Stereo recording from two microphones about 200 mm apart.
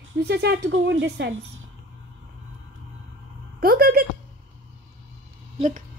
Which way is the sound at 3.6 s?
50° right (ahead or behind).